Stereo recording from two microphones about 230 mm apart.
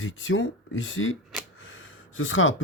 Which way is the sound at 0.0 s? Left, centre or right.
Left.